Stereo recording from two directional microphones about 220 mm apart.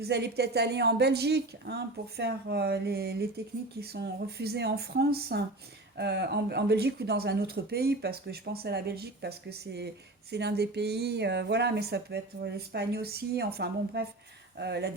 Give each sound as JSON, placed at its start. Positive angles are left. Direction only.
{"t": 0.0, "sound": "a woman's voice", "side_deg": -50}